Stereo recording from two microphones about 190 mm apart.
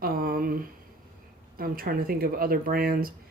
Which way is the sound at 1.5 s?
50° right (ahead or behind).